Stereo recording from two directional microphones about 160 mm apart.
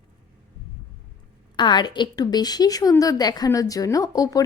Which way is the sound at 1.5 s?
25° left (ahead or behind).